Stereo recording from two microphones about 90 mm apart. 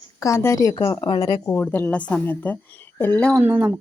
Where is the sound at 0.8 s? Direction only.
45° left (ahead or behind).